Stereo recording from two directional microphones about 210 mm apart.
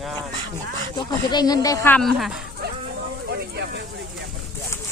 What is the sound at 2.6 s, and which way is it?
Dog, 50° right (ahead or behind).